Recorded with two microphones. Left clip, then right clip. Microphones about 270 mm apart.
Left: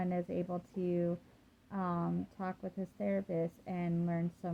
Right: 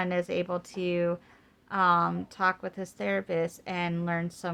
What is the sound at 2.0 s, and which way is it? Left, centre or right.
Speech, right.